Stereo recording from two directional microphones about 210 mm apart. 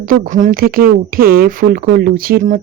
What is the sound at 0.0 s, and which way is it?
Speech, 40° right (ahead or behind).